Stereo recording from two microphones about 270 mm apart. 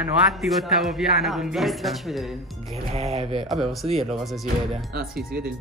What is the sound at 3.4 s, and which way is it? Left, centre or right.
Speech, centre.